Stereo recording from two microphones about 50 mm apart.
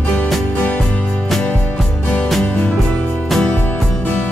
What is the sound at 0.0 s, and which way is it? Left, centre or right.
Music, left.